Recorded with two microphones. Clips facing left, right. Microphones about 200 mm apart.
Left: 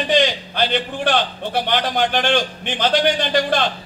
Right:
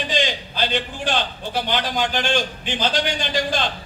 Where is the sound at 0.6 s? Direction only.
55° left (ahead or behind).